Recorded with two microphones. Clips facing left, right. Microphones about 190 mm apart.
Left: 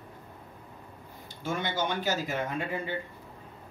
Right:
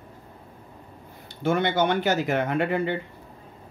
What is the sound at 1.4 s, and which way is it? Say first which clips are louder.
Speech: right 9 dB; 65° right (ahead or behind).